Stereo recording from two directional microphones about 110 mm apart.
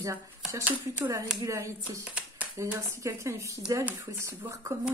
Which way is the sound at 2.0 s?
10° right (ahead or behind).